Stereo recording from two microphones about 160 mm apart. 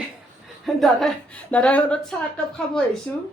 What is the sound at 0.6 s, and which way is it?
A woman's voice, centre (ahead or behind).